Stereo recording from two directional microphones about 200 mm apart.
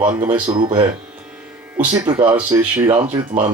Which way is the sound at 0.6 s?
25° right (ahead or behind).